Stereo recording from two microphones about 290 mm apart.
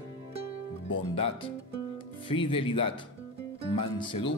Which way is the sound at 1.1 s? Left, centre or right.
Centre.